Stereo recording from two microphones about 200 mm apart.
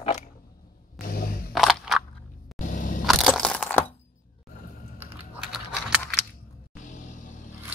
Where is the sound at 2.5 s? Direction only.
45° left (ahead or behind).